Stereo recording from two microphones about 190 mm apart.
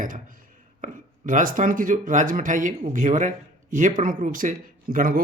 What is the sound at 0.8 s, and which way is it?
Speech, 45° right (ahead or behind).